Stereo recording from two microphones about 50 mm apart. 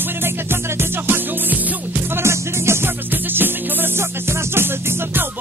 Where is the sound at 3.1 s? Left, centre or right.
Right.